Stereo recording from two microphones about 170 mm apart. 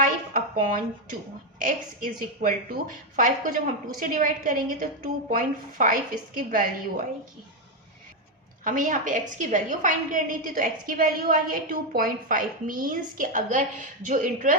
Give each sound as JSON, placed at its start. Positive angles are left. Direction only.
{"t": 0.0, "sound": "a sound", "side_deg": -55}
{"t": 1.5, "sound": "a woman's voice", "side_deg": -55}
{"t": 8.6, "sound": "a woman's voice", "side_deg": -50}